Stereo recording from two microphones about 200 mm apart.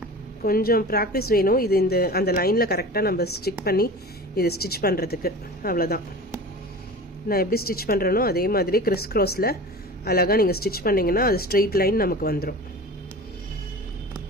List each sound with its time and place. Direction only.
0.4 s speech: 45° left (ahead or behind)
7.3 s speech: 50° left (ahead or behind)